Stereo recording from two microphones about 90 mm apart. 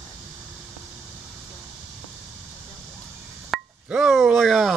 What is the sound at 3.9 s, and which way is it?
Speech, 5° right (ahead or behind).